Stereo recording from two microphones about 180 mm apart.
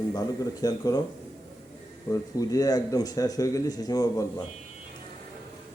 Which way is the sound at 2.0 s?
20° left (ahead or behind).